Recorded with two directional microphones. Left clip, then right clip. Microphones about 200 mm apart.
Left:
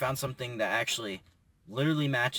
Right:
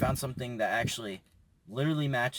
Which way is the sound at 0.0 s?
5° right (ahead or behind).